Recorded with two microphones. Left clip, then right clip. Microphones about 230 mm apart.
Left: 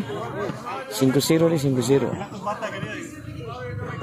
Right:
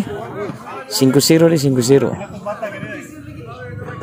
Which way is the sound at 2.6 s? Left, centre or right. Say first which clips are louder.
Right 4 dB; left.